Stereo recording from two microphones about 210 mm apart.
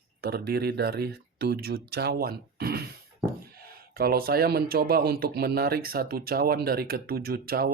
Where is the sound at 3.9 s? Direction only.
45° right (ahead or behind).